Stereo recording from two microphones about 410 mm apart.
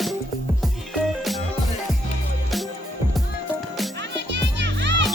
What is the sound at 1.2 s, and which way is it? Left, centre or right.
Music, centre.